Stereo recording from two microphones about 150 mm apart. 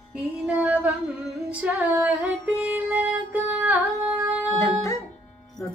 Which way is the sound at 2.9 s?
15° right (ahead or behind).